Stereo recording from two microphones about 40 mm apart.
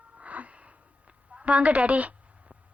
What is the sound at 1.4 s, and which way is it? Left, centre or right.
Speech, right.